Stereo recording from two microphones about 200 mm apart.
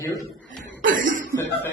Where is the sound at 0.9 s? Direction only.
40° right (ahead or behind).